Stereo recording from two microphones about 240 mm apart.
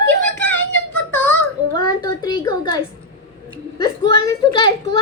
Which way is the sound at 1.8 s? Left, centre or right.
Centre.